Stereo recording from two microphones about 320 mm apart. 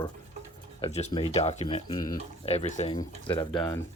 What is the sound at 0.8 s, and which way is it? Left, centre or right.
Speech, centre.